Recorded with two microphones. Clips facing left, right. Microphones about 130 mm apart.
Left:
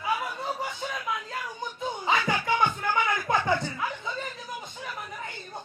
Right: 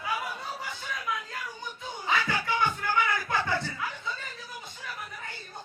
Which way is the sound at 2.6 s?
20° left (ahead or behind).